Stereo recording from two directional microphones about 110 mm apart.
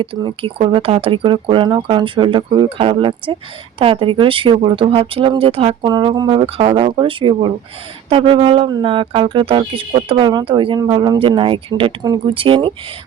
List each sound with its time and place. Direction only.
0.0 s speech: 50° right (ahead or behind)
5.8 s speech: 40° right (ahead or behind)
6.4 s speech: 60° right (ahead or behind)